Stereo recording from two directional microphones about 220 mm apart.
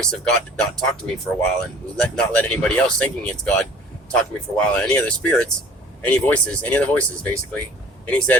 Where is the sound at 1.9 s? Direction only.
5° left (ahead or behind).